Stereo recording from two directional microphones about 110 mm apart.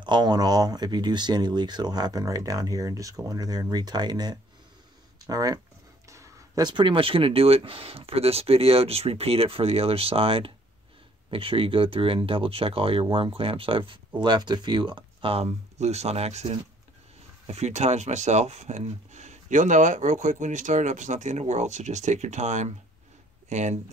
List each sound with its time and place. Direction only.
0.0 s speech: 40° right (ahead or behind); by 16.5 s 75° right (ahead or behind)
17.5 s speech: 90° right